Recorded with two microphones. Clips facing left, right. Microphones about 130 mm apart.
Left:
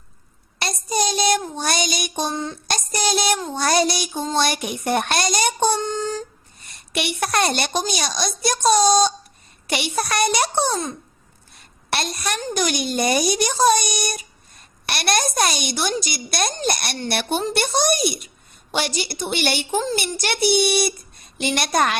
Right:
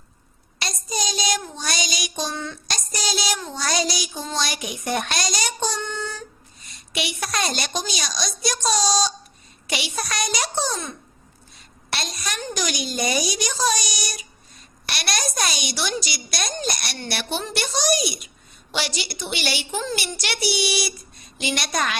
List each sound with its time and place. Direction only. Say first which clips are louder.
0.6 s child singing: left 6 dB; 55° left (ahead or behind)
1.5 s a sound: left 5 dB; 55° left (ahead or behind)
2.3 s child singing: left 4 dB; 35° left (ahead or behind)
2.6 s child singing: left 7 dB; 55° left (ahead or behind)
3.5 s a child's voice: left 5 dB; 55° left (ahead or behind)
5.7 s child singing: left 6 dB; 35° left (ahead or behind)
6.7 s a child's voice: left 3 dB; 60° left (ahead or behind)
10.7 s child singing: left 5 dB; 35° left (ahead or behind)
11.5 s a sound: left 6 dB; 60° left (ahead or behind)
12.5 s speech: left 5 dB; 55° left (ahead or behind)
19.7 s child singing: left 5 dB; 40° left (ahead or behind)
20.0 s speech: left 5 dB; 50° left (ahead or behind)